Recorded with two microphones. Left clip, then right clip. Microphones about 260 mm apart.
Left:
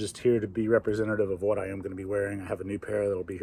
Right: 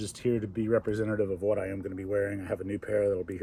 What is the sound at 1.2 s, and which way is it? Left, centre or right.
Speech, left.